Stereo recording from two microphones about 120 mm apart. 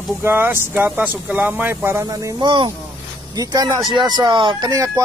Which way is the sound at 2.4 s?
40° right (ahead or behind).